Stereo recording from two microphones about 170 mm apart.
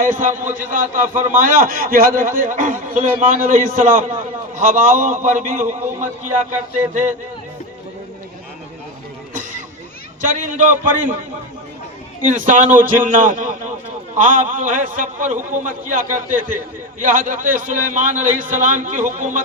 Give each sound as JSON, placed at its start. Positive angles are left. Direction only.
{"t": 0.0, "sound": "a man's voice", "side_deg": -50}
{"t": 1.1, "sound": "a man's voice", "side_deg": -10}
{"t": 1.4, "sound": "a man's voice", "side_deg": -55}
{"t": 9.3, "sound": "a sound", "side_deg": -50}
{"t": 10.2, "sound": "a man's voice", "side_deg": -50}
{"t": 12.2, "sound": "a man's voice", "side_deg": -50}